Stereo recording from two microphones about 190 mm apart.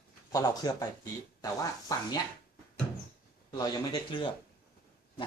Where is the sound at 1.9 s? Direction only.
20° left (ahead or behind).